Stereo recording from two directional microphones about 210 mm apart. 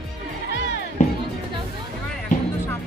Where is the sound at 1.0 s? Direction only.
40° left (ahead or behind).